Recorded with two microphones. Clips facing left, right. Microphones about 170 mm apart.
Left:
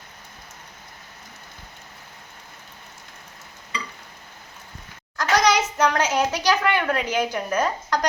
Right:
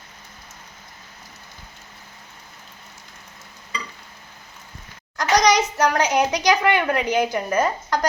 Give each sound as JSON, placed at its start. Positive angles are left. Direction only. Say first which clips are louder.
{"t": 5.1, "sound": "a child's voice", "louder": "right 2 dB", "side_deg": -15}